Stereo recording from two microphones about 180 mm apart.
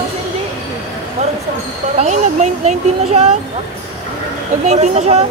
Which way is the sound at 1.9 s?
40° right (ahead or behind).